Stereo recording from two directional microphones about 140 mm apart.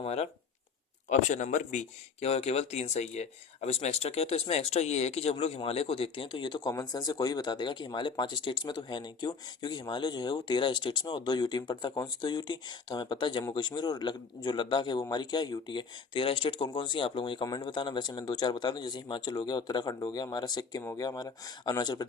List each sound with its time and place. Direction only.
0.0 s speech: 50° left (ahead or behind)
1.3 s speech: 65° left (ahead or behind); by 22.0 s 30° left (ahead or behind)